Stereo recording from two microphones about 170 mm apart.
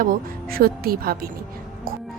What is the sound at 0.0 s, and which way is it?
Speech, 60° right (ahead or behind).